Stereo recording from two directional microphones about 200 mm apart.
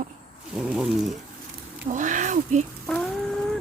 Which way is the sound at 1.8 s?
40° right (ahead or behind).